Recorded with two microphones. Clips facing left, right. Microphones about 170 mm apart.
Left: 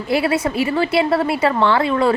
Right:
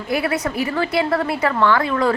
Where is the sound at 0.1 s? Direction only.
25° left (ahead or behind).